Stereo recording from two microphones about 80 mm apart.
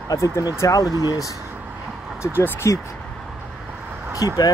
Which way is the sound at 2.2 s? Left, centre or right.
Left.